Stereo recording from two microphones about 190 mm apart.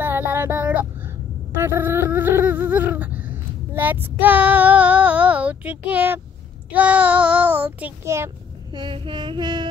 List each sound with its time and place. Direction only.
0.0 s a sound: 10° right (ahead or behind)
6.7 s child singing: 10° right (ahead or behind)
8.7 s female singing: 25° right (ahead or behind)